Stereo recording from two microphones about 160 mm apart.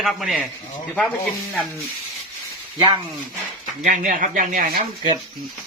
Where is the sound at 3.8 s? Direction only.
50° right (ahead or behind).